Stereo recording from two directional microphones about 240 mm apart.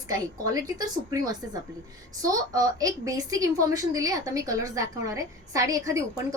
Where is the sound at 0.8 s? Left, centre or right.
Centre.